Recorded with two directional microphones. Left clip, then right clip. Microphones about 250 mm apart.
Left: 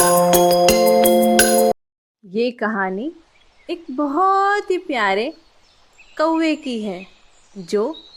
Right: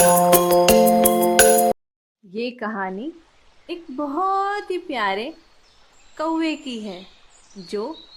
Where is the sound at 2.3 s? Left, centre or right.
Centre.